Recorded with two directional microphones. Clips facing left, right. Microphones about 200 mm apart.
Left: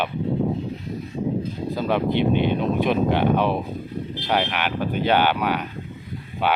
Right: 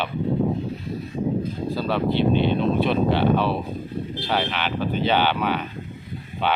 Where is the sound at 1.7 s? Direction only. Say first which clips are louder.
Left 1 dB; 15° left (ahead or behind).